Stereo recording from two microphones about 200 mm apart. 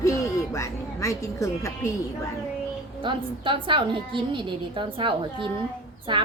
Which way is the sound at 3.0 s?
25° right (ahead or behind).